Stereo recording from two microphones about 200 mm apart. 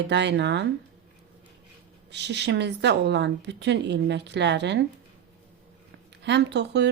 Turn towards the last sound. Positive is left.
turn(degrees=-60)  # may be behind; listen again after turning